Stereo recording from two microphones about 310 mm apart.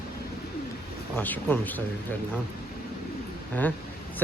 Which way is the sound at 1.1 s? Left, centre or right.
Centre.